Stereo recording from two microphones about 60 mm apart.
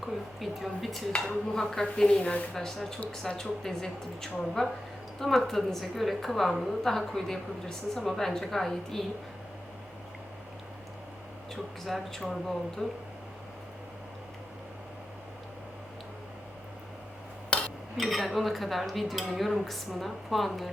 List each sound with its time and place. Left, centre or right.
0.0 s a woman's voice: centre
2.6 s a woman's voice: centre
11.5 s a woman's voice: centre
17.5 s cutlery: centre
17.9 s a woman's voice: centre